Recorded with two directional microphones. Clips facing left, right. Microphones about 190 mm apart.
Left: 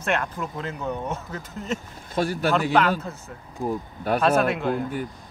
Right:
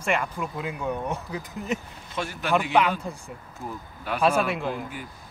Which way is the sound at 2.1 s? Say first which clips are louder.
Left 7 dB; 35° left (ahead or behind).